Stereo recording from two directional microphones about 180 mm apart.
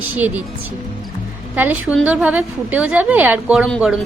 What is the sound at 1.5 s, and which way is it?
A woman's voice, 10° right (ahead or behind).